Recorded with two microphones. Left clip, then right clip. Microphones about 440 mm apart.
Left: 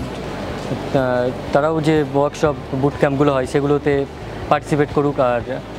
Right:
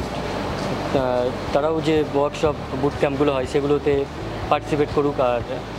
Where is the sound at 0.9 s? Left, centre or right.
Left.